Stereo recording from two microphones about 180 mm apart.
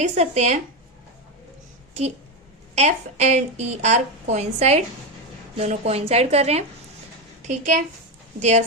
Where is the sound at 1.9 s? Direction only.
40° right (ahead or behind).